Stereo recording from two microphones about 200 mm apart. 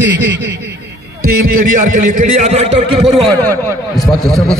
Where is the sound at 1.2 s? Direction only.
45° right (ahead or behind).